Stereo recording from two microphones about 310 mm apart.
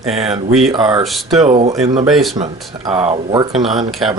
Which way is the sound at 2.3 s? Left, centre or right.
Centre.